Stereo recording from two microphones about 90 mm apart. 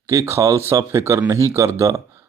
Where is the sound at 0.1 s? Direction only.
35° right (ahead or behind).